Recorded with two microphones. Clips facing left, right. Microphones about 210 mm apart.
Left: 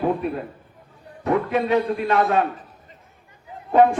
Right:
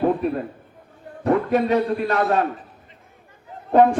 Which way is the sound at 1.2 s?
40° right (ahead or behind).